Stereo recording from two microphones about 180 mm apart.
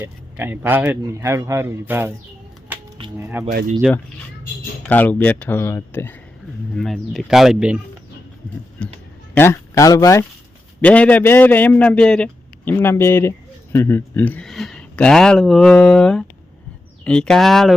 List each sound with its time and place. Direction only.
0.0 s a man's voice: 10° right (ahead or behind)
2.7 s music: 10° right (ahead or behind)
3.2 s a man's voice: 10° right (ahead or behind)
4.9 s a man's voice: 10° left (ahead or behind)
6.7 s speech: centre (ahead or behind)
8.8 s a man's voice: 5° left (ahead or behind)